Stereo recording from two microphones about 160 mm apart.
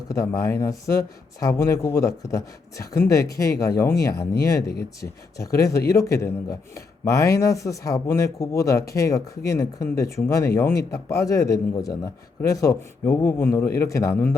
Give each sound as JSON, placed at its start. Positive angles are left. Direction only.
{"t": 0.1, "sound": "a man's voice", "side_deg": 20}